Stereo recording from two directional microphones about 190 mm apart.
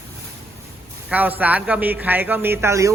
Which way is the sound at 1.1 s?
10° right (ahead or behind).